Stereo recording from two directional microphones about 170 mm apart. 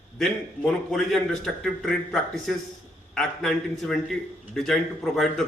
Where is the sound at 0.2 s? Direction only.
Centre (ahead or behind).